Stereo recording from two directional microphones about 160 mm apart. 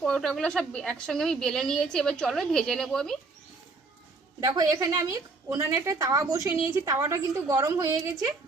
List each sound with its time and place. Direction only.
0.0 s a woman's voice: 5° left (ahead or behind)
4.4 s a woman's voice: 20° right (ahead or behind)